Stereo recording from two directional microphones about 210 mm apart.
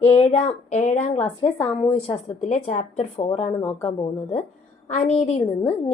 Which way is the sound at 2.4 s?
35° left (ahead or behind).